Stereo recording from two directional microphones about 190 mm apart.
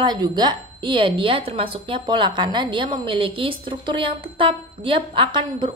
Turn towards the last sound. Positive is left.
turn(degrees=-25)  # may be behind; listen again after turning